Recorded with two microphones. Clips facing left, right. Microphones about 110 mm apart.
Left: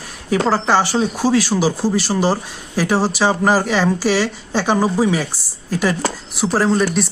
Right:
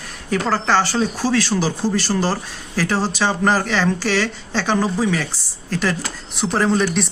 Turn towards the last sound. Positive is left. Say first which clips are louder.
# left 2 dB
turn(degrees=5)  # may be behind; listen again after turning